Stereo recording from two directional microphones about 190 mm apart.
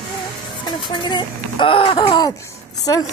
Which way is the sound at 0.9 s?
25° left (ahead or behind).